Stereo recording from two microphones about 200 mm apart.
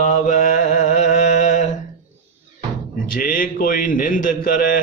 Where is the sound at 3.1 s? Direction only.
45° left (ahead or behind).